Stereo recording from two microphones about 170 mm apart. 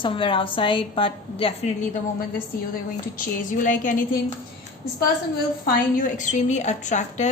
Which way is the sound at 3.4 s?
50° left (ahead or behind).